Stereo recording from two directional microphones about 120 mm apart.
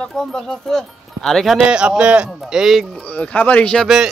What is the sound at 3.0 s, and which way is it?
Speech, 10° left (ahead or behind).